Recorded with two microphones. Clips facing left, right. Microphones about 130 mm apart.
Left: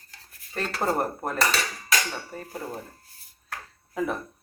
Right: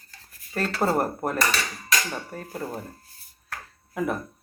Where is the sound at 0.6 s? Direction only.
5° right (ahead or behind).